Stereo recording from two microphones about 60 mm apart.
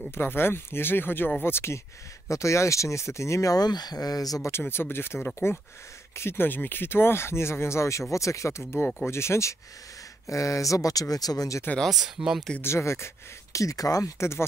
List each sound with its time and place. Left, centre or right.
0.1 s speech: left
2.2 s speech: left
4.4 s speech: left
11.8 s speech: centre
12.6 s speech: left